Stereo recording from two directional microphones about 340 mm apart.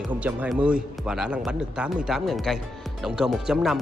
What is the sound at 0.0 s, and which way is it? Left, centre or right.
Speech, centre.